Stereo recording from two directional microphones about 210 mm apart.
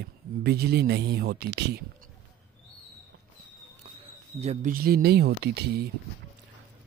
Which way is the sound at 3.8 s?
25° right (ahead or behind).